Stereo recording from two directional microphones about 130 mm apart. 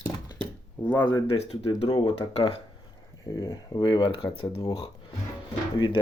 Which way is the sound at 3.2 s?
30° left (ahead or behind).